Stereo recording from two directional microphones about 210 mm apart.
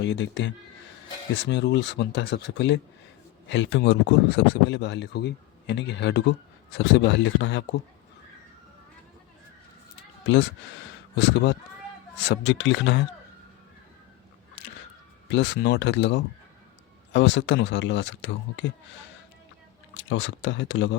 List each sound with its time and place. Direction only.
0.0 s speech: 60° left (ahead or behind)
11.2 s speech: 60° left (ahead or behind)
15.3 s speech: 55° left (ahead or behind)
19.9 s speech: 65° left (ahead or behind)